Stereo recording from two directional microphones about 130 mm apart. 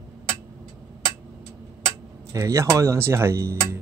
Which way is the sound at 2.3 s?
25° right (ahead or behind).